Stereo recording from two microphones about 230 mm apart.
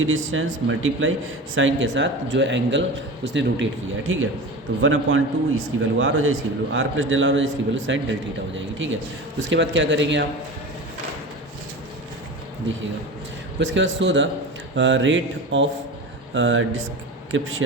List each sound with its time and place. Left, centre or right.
0.0 s a man's voice: right
13.6 s a man's voice: right